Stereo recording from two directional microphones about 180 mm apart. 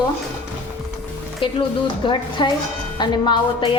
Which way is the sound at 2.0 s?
25° left (ahead or behind).